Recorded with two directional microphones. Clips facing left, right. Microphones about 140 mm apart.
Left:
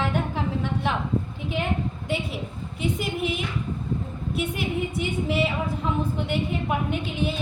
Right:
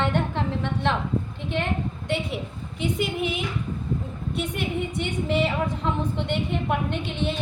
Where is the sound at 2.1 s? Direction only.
Centre (ahead or behind).